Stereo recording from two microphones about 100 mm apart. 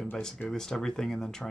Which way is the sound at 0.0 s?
5° left (ahead or behind).